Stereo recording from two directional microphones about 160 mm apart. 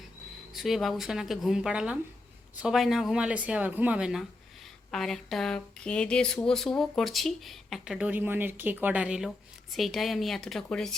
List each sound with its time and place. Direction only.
0.5 s speech: centre (ahead or behind)